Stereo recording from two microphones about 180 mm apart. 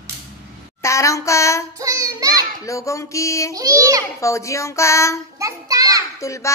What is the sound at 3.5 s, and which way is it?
Speech, 20° right (ahead or behind).